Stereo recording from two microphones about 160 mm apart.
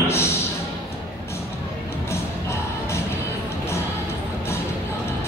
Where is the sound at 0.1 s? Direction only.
15° left (ahead or behind).